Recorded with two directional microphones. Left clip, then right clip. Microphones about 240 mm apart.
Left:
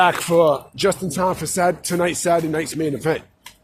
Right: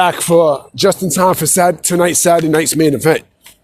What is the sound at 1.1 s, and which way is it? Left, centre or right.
Speech, right.